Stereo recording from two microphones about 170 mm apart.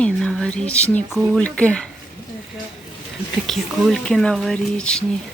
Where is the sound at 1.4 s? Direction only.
5° left (ahead or behind).